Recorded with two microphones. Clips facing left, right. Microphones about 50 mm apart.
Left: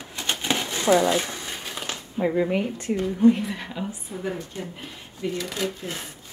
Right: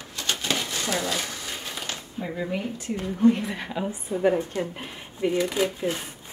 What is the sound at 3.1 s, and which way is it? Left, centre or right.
A woman's voice, centre.